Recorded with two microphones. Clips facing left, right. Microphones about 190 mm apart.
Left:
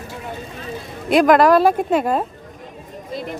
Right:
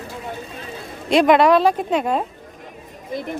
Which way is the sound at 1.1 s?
Centre (ahead or behind).